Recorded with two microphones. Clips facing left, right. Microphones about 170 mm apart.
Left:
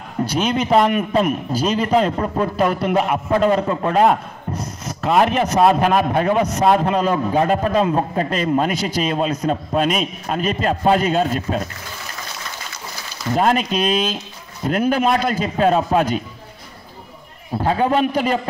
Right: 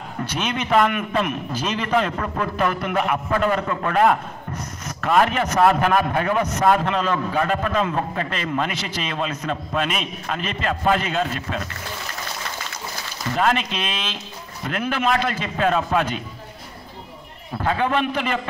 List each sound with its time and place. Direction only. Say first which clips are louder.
0.2 s a man's voice: left 7 dB; 35° left (ahead or behind)
4.5 s a sound: left 6 dB; 25° left (ahead or behind)
5.1 s a man's voice: left 3 dB; 25° left (ahead or behind)
7.1 s a man's voice: left 4 dB; 20° left (ahead or behind)
7.4 s a man's voice: left 5 dB; 35° left (ahead or behind)
13.3 s a man's voice: left 4 dB; 40° left (ahead or behind)
17.6 s a man's voice: left 4 dB; 35° left (ahead or behind)